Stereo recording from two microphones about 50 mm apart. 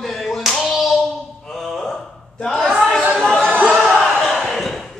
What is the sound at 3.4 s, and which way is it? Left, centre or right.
Chatter, right.